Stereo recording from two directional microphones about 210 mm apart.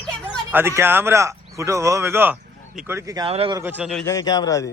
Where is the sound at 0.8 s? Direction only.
10° right (ahead or behind); by 3.6 s 25° right (ahead or behind).